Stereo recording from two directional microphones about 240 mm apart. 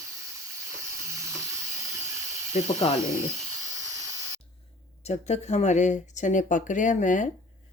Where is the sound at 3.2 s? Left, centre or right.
Centre.